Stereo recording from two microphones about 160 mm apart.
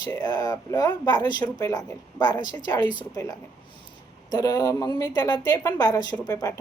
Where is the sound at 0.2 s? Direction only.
25° left (ahead or behind).